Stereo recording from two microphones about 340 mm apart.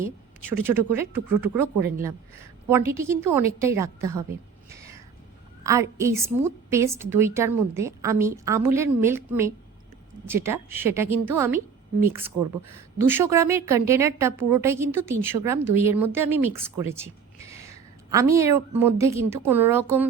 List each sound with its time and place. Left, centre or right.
0.0 s a woman's voice: centre
4.7 s cat: centre
5.6 s a woman's voice: centre
15.3 s speech: right
15.7 s a woman's voice: centre
16.9 s a sound: centre
18.1 s a woman's voice: centre